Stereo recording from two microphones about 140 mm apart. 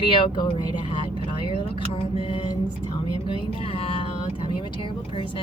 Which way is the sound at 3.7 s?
40° left (ahead or behind).